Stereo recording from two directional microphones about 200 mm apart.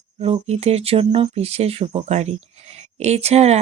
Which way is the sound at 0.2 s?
30° right (ahead or behind).